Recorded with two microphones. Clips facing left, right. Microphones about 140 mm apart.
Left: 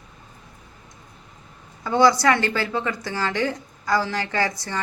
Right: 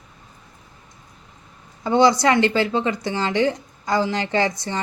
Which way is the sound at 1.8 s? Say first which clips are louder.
Right 1 dB; 20° right (ahead or behind).